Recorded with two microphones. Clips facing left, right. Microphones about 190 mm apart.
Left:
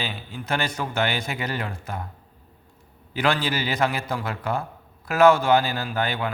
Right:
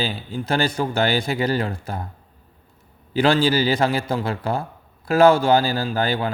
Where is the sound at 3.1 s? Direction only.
30° right (ahead or behind).